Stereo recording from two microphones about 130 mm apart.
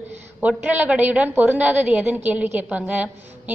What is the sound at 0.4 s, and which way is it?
A woman's voice, 10° right (ahead or behind).